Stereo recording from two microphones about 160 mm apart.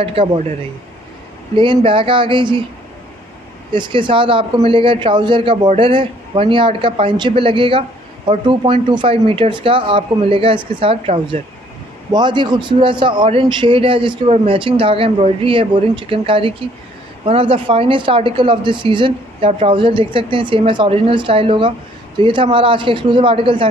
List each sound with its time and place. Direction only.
0.0 s speech: 35° right (ahead or behind)
1.6 s speech: 30° right (ahead or behind)
3.7 s a man's voice: 30° right (ahead or behind)